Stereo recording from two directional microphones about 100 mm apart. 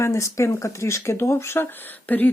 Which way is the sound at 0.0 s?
30° left (ahead or behind).